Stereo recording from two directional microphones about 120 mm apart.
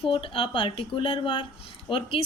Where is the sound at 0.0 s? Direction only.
50° left (ahead or behind).